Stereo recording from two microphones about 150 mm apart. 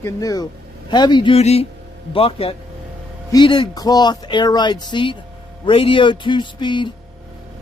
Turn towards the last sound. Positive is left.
turn(degrees=30)  # may be behind; listen again after turning